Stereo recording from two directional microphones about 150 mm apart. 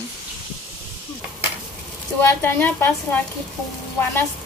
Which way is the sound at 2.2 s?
15° left (ahead or behind).